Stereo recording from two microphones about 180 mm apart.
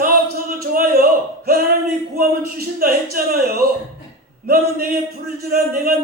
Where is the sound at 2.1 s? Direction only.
55° right (ahead or behind).